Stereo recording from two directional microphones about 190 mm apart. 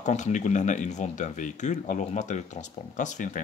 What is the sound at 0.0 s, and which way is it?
Speech, 40° left (ahead or behind).